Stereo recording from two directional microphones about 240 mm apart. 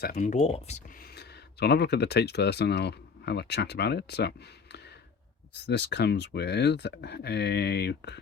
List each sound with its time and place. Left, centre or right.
0.0 s speech: left
0.9 s speech: left